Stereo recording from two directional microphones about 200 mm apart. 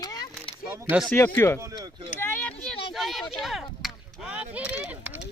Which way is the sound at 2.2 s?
10° left (ahead or behind).